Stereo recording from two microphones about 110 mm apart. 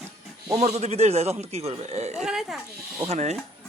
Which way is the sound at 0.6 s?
80° right.